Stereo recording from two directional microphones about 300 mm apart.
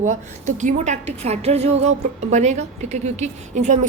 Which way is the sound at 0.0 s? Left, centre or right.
Right.